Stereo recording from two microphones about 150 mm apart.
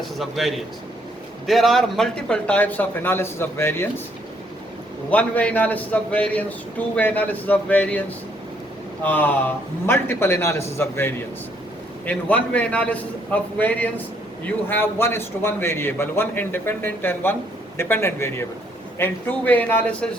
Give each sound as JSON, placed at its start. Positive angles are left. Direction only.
{"t": 0.2, "sound": "a man's voice", "side_deg": 0}
{"t": 5.1, "sound": "a man's voice", "side_deg": 10}
{"t": 9.0, "sound": "a man's voice", "side_deg": 10}